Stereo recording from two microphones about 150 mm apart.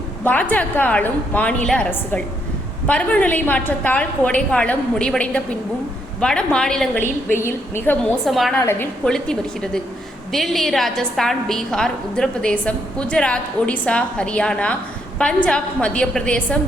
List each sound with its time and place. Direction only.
0.3 s a woman's voice: 10° left (ahead or behind)
7.3 s a woman's voice: 15° left (ahead or behind)
8.2 s a woman's voice: centre (ahead or behind)
8.6 s a woman's voice: 15° left (ahead or behind)